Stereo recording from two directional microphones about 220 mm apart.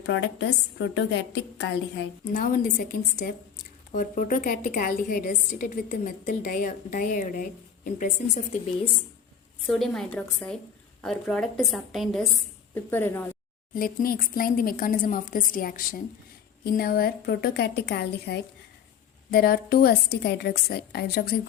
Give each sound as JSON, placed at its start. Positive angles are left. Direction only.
{"t": 0.0, "sound": "a woman's voice", "side_deg": 55}
{"t": 2.3, "sound": "a woman's voice", "side_deg": 40}
{"t": 9.6, "sound": "a woman's voice", "side_deg": 0}
{"t": 13.7, "sound": "a woman's voice", "side_deg": 40}